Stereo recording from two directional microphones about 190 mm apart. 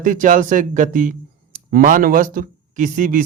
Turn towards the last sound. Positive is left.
turn(degrees=-45)  # may be behind; listen again after turning